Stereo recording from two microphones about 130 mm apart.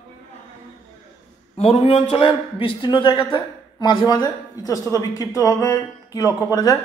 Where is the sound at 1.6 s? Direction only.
50° left (ahead or behind).